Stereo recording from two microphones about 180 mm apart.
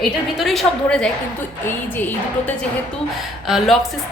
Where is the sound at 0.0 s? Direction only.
Centre (ahead or behind).